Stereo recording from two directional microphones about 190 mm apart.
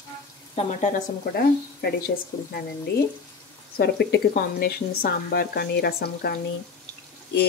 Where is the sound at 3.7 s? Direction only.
60° left (ahead or behind).